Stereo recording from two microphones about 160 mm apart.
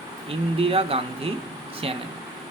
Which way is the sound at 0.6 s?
35° right (ahead or behind).